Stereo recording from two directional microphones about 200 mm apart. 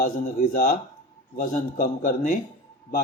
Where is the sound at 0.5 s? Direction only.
45° left (ahead or behind).